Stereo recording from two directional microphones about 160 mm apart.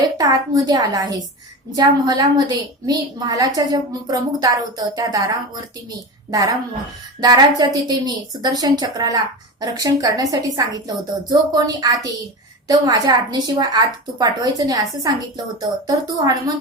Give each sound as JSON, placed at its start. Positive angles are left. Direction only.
{"t": 0.2, "sound": "a woman's voice", "side_deg": -25}
{"t": 7.2, "sound": "a woman's voice", "side_deg": -25}